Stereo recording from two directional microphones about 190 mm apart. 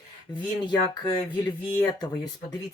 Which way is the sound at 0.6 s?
25° left (ahead or behind).